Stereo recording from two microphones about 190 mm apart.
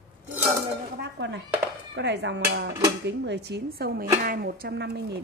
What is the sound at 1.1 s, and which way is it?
A woman's voice, 70° right (ahead or behind).